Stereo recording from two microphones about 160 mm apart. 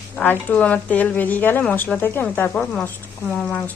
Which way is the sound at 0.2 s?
10° left (ahead or behind).